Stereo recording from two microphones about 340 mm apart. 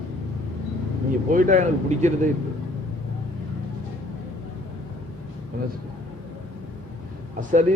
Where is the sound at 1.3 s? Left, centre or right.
Right.